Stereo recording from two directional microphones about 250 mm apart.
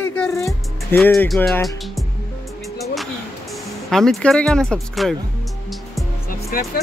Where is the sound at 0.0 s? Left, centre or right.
Centre.